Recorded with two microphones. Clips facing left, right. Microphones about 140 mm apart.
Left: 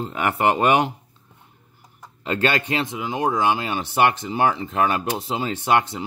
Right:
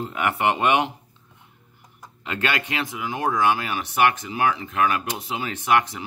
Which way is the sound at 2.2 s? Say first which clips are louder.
Left 4 dB; 30° left (ahead or behind).